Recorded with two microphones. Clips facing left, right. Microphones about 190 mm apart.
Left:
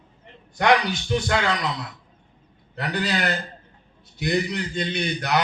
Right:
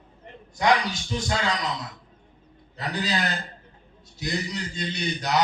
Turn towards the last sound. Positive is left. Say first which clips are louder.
# left 1 dB
turn(degrees=60)  # may be behind; listen again after turning